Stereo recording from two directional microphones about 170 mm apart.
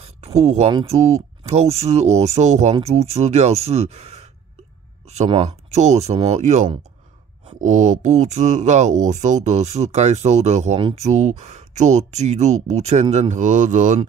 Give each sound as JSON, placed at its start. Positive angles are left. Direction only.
{"t": 0.0, "sound": "speech", "side_deg": -40}